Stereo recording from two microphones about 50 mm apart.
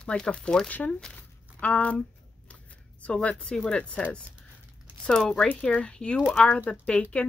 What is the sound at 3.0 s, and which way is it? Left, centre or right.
Speech, centre.